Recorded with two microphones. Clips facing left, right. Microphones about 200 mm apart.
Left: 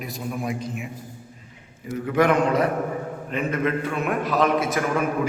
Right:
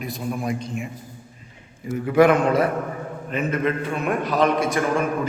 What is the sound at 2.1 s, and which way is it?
A man's voice, 10° right (ahead or behind).